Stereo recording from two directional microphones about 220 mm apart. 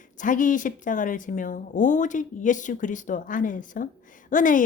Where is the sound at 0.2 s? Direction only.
35° left (ahead or behind).